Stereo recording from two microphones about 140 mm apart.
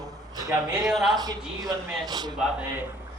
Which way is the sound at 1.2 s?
30° right (ahead or behind).